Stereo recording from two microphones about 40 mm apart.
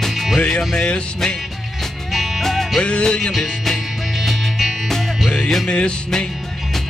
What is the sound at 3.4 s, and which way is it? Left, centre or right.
Music, centre.